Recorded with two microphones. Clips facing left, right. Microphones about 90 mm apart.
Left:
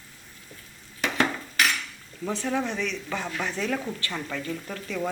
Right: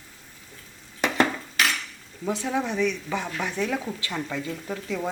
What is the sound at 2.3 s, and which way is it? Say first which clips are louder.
Speech: right 1 dB; 15° right (ahead or behind).